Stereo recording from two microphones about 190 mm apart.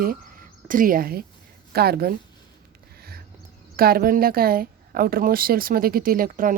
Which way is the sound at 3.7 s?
50° right (ahead or behind).